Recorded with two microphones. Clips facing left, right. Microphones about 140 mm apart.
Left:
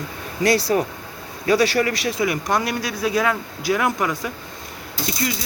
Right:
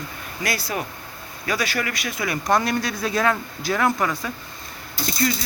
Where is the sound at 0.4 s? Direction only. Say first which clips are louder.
Left 9 dB; 35° left (ahead or behind).